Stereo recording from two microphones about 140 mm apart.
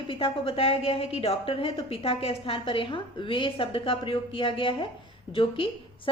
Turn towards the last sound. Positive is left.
turn(degrees=40)  # may be behind; listen again after turning